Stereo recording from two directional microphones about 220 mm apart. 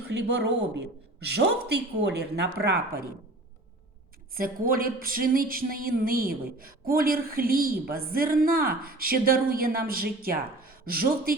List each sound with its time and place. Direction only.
0.1 s speech: 50° right (ahead or behind)
4.4 s speech: 40° right (ahead or behind)